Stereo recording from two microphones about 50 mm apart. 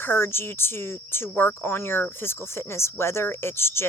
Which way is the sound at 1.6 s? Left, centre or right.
Left.